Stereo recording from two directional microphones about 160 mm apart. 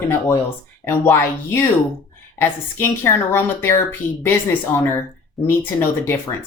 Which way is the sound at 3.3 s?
15° left (ahead or behind).